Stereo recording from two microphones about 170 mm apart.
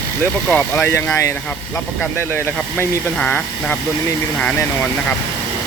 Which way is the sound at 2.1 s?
15° left (ahead or behind).